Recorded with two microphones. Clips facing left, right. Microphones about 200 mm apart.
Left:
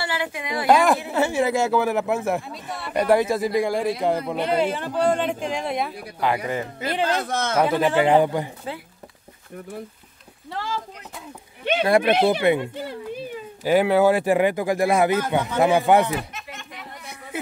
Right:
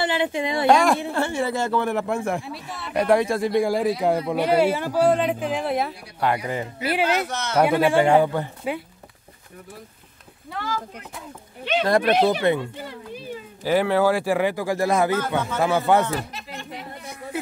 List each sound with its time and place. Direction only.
0.0 s a woman's voice: 20° right (ahead or behind)
0.7 s speech: 5° left (ahead or behind)
7.2 s speech: 55° left (ahead or behind)
7.7 s speech: 10° right (ahead or behind)
8.0 s speech: 15° left (ahead or behind)
10.5 s a sound: 30° left (ahead or behind)
11.8 s speech: 15° left (ahead or behind)
13.7 s speech: 15° left (ahead or behind)
16.2 s a sound: 35° right (ahead or behind)